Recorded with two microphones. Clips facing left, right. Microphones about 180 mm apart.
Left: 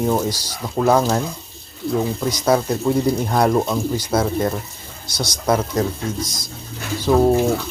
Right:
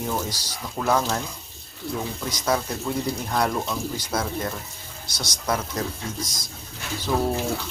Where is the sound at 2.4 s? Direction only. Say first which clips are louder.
Left 7 dB; 40° left (ahead or behind).